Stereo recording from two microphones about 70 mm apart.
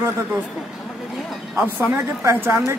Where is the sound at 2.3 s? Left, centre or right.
Right.